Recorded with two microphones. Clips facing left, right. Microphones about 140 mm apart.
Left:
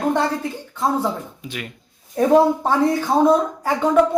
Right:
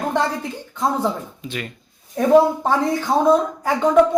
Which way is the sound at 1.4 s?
10° left (ahead or behind).